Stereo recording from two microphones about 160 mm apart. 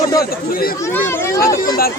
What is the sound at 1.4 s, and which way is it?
Speech, 60° left (ahead or behind).